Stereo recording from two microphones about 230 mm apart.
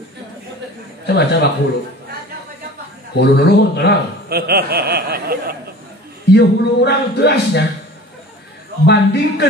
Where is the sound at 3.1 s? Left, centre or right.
Left.